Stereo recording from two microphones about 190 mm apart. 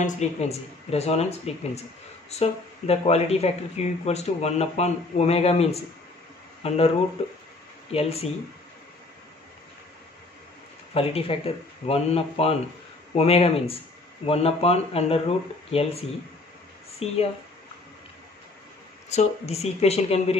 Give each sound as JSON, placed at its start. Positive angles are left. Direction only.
{"t": 0.0, "sound": "speech", "side_deg": 35}
{"t": 7.9, "sound": "speech", "side_deg": 30}
{"t": 10.9, "sound": "speech", "side_deg": 30}
{"t": 19.0, "sound": "speech", "side_deg": 35}